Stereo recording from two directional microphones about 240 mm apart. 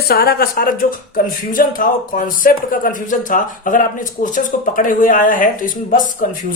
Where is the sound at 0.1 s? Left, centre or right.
Left.